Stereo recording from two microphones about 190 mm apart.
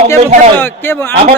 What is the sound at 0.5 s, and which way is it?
Speech, 10° left (ahead or behind).